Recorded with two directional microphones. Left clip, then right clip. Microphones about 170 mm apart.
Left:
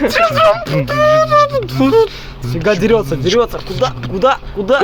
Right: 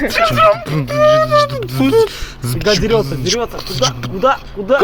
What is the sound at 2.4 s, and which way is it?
Speech, 55° right (ahead or behind).